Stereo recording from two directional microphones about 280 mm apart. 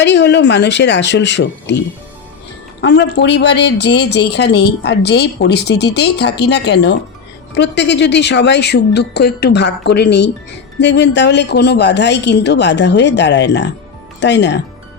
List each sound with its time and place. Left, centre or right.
0.0 s speech: left
2.8 s speech: left